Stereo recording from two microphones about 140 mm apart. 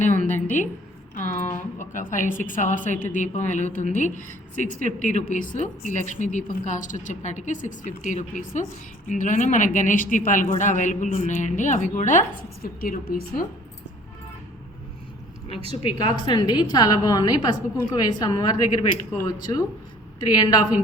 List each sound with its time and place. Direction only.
0.3 s a sound: 60° left (ahead or behind)
1.1 s a woman's voice: 65° left (ahead or behind)
12.6 s a woman's voice: 85° left
15.7 s a woman's voice: 35° left (ahead or behind)